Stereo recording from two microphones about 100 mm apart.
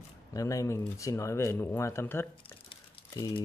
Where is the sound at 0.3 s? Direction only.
35° left (ahead or behind).